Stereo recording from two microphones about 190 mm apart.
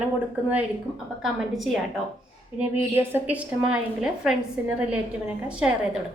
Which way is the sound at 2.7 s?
10° right (ahead or behind).